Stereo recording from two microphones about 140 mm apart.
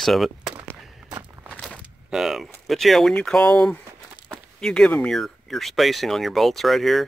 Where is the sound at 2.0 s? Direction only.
5° right (ahead or behind).